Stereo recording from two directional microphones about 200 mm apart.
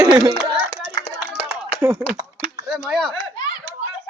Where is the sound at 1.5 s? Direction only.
10° right (ahead or behind).